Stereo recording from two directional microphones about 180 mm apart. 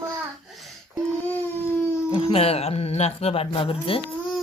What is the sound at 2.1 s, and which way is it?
Speech, 30° left (ahead or behind).